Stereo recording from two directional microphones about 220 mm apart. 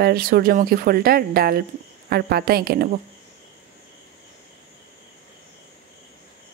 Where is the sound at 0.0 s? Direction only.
45° right (ahead or behind).